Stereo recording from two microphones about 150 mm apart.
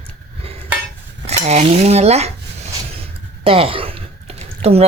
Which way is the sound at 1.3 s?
45° right (ahead or behind).